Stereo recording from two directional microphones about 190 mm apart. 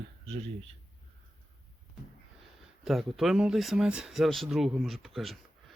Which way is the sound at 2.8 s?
Centre (ahead or behind).